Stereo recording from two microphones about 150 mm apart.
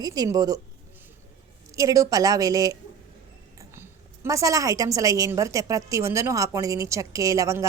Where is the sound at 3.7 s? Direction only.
20° right (ahead or behind).